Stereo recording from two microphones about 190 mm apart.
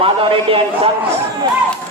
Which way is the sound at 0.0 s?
30° right (ahead or behind).